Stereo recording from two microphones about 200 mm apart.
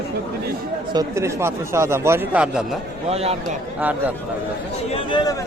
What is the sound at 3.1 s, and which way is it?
Speech, 30° right (ahead or behind).